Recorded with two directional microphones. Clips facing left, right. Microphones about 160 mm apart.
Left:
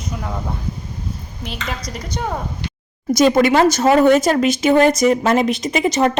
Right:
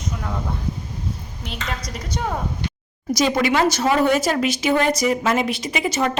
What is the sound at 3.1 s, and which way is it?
A woman's voice, 50° left (ahead or behind).